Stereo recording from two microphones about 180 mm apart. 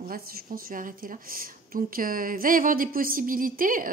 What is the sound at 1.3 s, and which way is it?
Speech, 50° right (ahead or behind).